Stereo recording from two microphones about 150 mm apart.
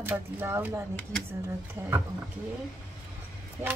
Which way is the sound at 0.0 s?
15° right (ahead or behind).